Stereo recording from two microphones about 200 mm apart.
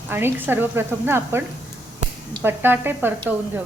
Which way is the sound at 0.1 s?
10° right (ahead or behind).